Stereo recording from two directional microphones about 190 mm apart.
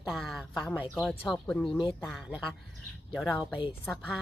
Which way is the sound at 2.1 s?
Centre (ahead or behind).